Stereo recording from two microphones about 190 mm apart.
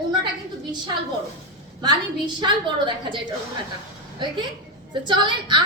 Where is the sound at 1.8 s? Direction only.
25° right (ahead or behind).